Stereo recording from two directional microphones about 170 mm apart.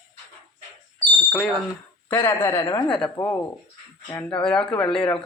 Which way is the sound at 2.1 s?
15° left (ahead or behind).